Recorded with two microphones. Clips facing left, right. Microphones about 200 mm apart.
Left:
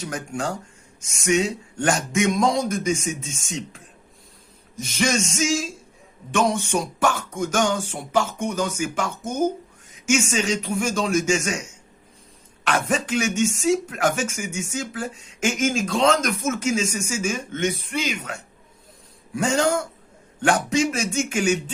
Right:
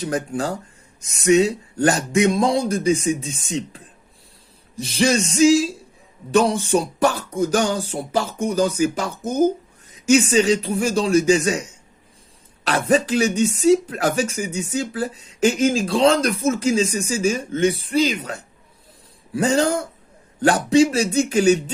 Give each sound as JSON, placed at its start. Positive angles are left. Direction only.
{"t": 0.0, "sound": "speech", "side_deg": -35}
{"t": 12.6, "sound": "speech", "side_deg": -35}